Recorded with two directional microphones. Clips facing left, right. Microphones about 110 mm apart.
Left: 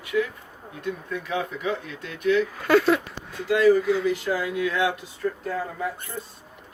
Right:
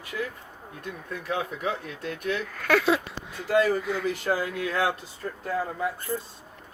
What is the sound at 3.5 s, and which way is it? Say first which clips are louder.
Speech: left 4 dB; 45° right (ahead or behind).